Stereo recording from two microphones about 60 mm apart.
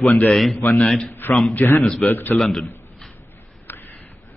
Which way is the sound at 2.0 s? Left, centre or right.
Left.